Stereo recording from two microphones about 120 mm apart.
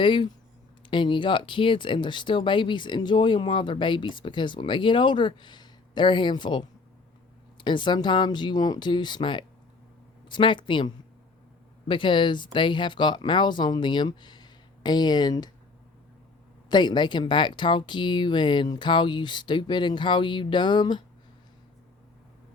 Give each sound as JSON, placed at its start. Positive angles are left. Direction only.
{"t": 0.0, "sound": "speech", "side_deg": 40}
{"t": 16.6, "sound": "speech", "side_deg": 40}